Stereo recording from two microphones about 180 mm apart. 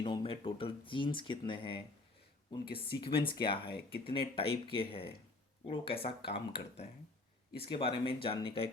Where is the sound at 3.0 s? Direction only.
30° left (ahead or behind).